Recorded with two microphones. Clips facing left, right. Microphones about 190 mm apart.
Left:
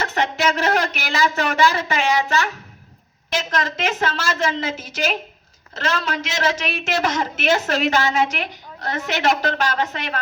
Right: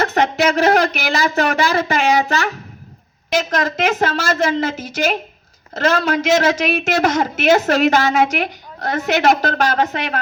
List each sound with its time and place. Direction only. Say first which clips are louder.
0.0 s a woman's voice: right 5 dB; 40° right (ahead or behind)